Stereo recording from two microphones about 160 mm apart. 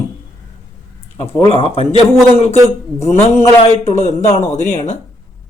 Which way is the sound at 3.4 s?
45° left (ahead or behind).